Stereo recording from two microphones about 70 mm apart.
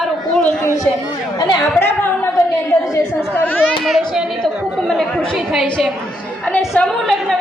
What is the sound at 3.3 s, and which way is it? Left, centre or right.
Speech, left.